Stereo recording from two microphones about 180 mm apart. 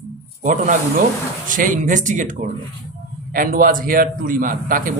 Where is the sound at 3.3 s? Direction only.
50° right (ahead or behind).